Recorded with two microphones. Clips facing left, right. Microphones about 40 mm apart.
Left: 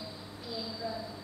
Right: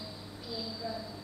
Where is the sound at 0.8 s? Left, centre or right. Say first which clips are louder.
Left 1 dB; centre.